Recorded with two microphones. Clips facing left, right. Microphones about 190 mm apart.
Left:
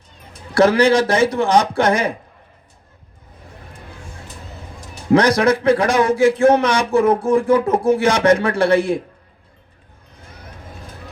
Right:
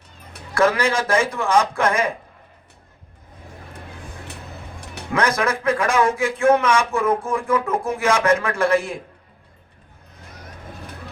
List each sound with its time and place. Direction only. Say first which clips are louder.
0.5 s a man's voice: left 6 dB; 35° left (ahead or behind)
5.1 s a man's voice: left 7 dB; 35° left (ahead or behind)